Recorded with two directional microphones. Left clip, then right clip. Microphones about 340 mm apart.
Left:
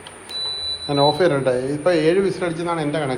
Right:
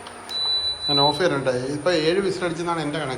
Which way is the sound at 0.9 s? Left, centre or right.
Centre.